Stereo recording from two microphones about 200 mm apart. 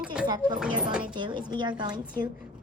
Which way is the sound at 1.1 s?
25° right (ahead or behind).